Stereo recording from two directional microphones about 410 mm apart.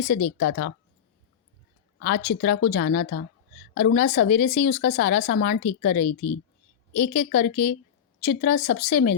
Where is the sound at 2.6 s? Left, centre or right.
Left.